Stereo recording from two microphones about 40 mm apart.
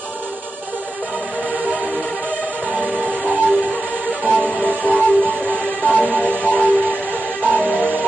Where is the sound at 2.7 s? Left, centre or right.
Right.